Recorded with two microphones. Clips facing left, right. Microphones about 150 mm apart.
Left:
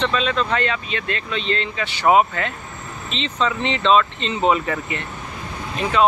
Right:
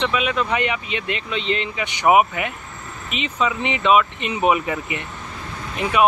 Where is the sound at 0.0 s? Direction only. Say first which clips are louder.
Left 1 dB; 10° right (ahead or behind).